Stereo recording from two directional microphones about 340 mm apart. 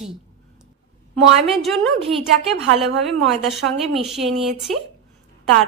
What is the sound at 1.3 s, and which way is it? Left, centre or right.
A woman's voice, centre.